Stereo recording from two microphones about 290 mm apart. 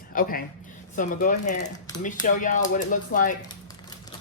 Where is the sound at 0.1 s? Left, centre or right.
Left.